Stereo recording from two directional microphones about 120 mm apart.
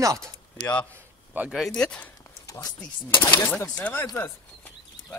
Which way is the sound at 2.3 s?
25° left (ahead or behind).